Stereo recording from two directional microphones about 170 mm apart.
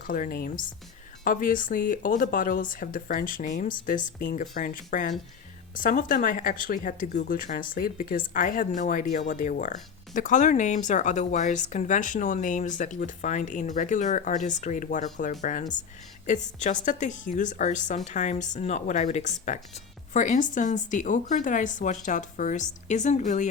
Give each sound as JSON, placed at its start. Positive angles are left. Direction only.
{"t": 0.0, "sound": "a woman's voice", "side_deg": 50}